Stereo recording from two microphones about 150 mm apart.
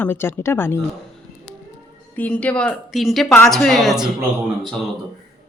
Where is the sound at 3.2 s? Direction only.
20° left (ahead or behind).